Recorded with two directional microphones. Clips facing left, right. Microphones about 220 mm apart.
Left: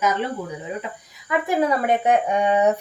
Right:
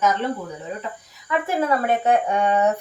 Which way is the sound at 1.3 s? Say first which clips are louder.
Left 1 dB; 15° left (ahead or behind).